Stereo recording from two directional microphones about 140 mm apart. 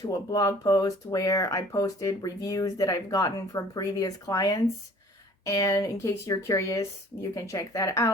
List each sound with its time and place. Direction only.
0.1 s speech: 25° left (ahead or behind)